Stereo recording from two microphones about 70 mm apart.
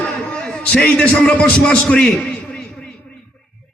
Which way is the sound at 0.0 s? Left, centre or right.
Centre.